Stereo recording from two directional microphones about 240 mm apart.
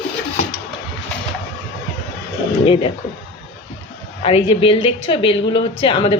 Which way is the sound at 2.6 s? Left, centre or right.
Left.